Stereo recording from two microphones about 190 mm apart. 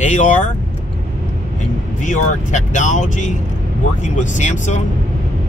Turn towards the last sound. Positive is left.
turn(degrees=40)  # may be behind; listen again after turning